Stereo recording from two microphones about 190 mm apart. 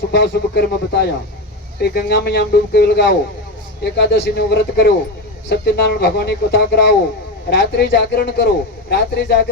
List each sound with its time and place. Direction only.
0.1 s speech: 65° left (ahead or behind)